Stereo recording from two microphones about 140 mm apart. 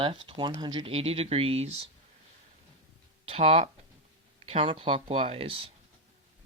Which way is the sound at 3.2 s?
45° right (ahead or behind).